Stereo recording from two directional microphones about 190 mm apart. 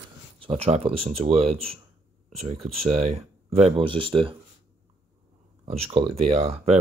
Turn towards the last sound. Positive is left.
turn(degrees=-35)  # may be behind; listen again after turning